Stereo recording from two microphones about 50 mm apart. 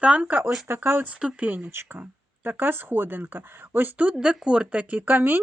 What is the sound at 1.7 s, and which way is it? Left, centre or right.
Speech, right.